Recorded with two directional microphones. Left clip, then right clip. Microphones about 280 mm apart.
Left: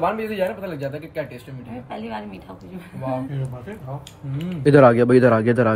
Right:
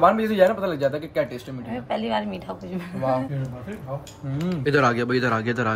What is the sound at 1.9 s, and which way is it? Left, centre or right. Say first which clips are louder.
Speech: right 7 dB; right.